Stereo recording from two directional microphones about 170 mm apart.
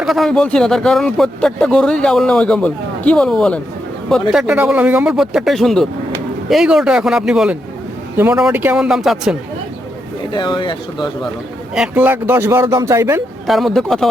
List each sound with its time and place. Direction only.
0.0 s speech: centre (ahead or behind)
10.3 s speech: 25° left (ahead or behind)
11.7 s speech: 5° right (ahead or behind)
13.5 s speech: centre (ahead or behind)